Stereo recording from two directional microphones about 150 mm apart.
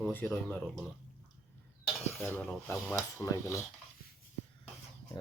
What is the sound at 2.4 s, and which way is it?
Filing, 5° left (ahead or behind).